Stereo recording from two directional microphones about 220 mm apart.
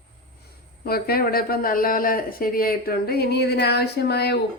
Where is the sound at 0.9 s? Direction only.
45° left (ahead or behind).